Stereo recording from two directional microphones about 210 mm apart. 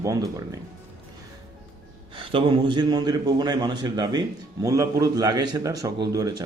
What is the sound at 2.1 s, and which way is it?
Speech, 25° right (ahead or behind).